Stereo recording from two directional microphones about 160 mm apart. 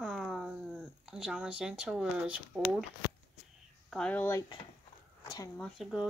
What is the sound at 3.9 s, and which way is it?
Speech, 10° left (ahead or behind).